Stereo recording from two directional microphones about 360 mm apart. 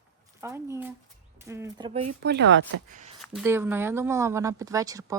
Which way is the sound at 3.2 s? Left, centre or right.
Centre.